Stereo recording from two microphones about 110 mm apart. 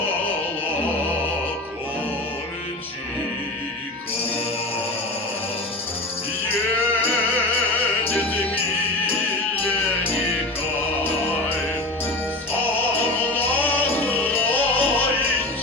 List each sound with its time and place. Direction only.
13.3 s music: 15° left (ahead or behind)